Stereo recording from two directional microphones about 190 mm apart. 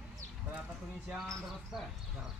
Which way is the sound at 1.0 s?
Centre (ahead or behind).